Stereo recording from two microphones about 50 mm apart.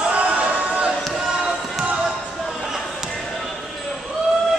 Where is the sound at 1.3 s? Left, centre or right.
Centre.